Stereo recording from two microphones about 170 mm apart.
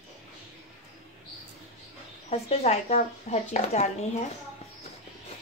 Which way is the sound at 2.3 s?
40° left (ahead or behind).